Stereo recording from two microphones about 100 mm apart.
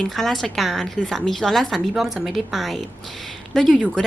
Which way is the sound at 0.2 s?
Centre (ahead or behind).